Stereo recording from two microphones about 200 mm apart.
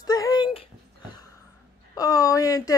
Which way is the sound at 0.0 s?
20° left (ahead or behind).